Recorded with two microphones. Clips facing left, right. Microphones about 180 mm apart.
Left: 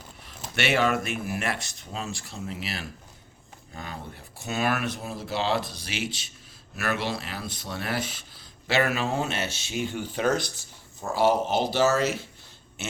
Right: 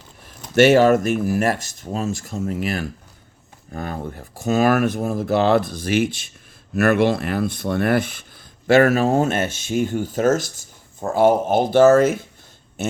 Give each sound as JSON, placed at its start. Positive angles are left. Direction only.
{"t": 0.3, "sound": "speech", "side_deg": -40}